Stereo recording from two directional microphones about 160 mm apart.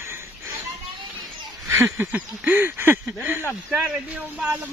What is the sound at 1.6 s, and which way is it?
Speech, 15° right (ahead or behind).